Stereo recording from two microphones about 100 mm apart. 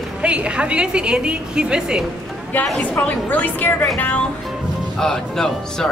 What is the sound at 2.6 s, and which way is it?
Speech, 5° left (ahead or behind).